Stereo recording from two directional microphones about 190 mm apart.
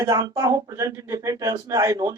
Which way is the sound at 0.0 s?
20° right (ahead or behind).